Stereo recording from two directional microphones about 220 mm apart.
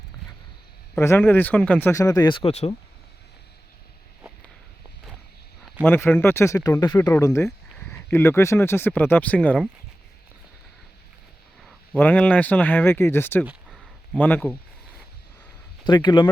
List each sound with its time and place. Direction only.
0.9 s speech: 10° left (ahead or behind); by 2.7 s 30° left (ahead or behind)
5.8 s speech: 10° left (ahead or behind)
11.6 s speech: 5° left (ahead or behind)
13.4 s a sound: 5° right (ahead or behind)
15.8 s speech: 20° left (ahead or behind)